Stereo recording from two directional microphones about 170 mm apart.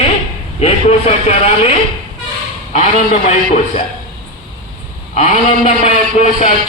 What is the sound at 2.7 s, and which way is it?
Speech, 45° left (ahead or behind).